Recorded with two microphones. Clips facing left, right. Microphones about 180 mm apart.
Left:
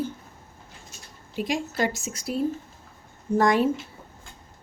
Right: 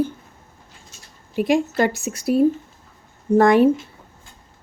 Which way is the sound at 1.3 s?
55° right (ahead or behind).